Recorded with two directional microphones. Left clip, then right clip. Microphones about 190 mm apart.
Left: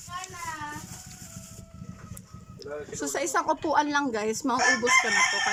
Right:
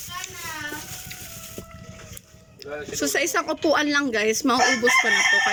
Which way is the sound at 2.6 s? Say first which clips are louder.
Right 6 dB; 15° left (ahead or behind).